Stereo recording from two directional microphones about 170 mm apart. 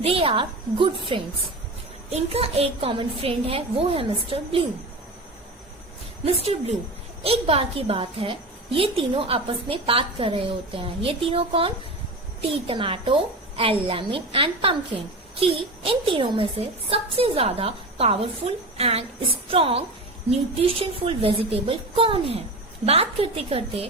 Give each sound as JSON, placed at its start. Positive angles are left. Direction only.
{"t": 0.0, "sound": "a woman's voice", "side_deg": -35}
{"t": 6.2, "sound": "a woman's voice", "side_deg": -35}